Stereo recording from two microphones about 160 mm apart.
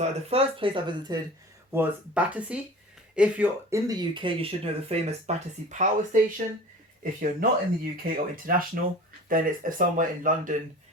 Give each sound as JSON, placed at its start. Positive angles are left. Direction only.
{"t": 0.0, "sound": "speech", "side_deg": -40}
{"t": 1.7, "sound": "speech", "side_deg": -10}
{"t": 4.1, "sound": "speech", "side_deg": -30}